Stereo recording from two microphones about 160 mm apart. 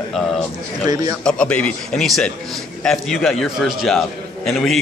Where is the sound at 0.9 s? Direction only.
25° right (ahead or behind).